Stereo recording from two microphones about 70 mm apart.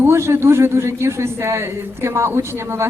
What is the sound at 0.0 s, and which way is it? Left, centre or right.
A man's voice, right.